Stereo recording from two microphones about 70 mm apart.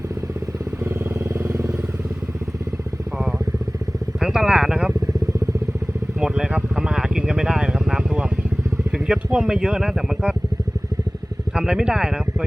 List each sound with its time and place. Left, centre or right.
0.9 s vehicle: right
4.2 s speech: centre
6.1 s vehicle: centre
8.9 s speech: centre
11.5 s speech: centre